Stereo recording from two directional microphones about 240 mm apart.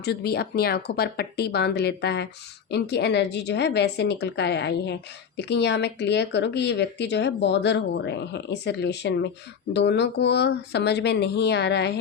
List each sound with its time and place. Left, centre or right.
0.0 s speech: left